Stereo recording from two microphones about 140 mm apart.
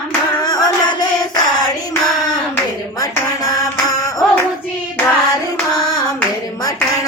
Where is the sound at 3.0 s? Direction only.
25° left (ahead or behind).